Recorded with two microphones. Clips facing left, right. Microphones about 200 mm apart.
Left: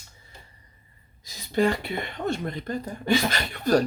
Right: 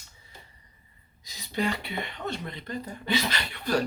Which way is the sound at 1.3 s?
45° left (ahead or behind).